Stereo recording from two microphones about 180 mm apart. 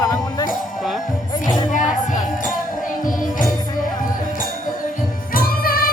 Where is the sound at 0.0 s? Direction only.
20° left (ahead or behind).